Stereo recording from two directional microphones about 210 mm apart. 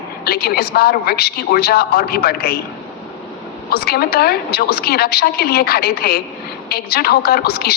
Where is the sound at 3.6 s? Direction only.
50° left (ahead or behind).